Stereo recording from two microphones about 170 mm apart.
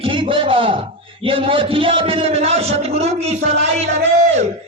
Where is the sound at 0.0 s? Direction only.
30° right (ahead or behind).